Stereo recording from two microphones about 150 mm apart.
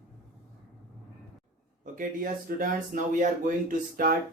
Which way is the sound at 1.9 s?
65° right (ahead or behind).